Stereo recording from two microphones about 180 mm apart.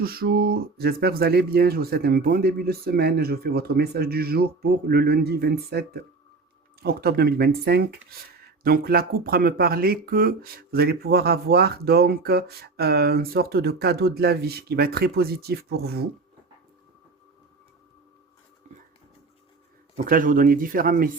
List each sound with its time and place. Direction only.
0.0 s speech: 55° right (ahead or behind)
20.1 s speech: 50° right (ahead or behind)